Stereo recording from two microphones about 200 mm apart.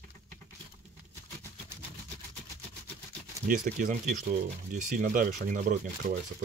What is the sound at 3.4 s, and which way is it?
Speech, 40° right (ahead or behind).